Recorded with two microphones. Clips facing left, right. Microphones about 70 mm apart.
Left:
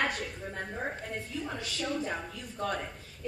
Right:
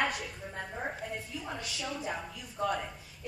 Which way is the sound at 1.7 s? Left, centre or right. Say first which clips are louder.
Left 5 dB; centre.